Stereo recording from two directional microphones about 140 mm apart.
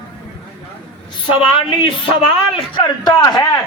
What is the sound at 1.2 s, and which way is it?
A man's voice, 35° left (ahead or behind).